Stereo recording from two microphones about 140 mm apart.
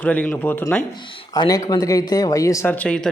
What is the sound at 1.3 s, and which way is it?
Speech, 25° left (ahead or behind).